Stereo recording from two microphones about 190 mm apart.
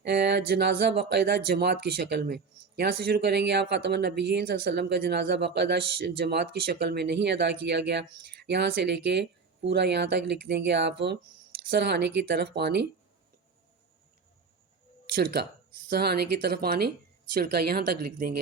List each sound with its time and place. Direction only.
0.0 s speech: 60° right (ahead or behind)
15.1 s speech: 55° right (ahead or behind)